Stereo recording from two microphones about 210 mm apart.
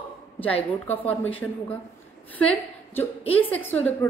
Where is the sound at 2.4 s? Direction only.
10° left (ahead or behind).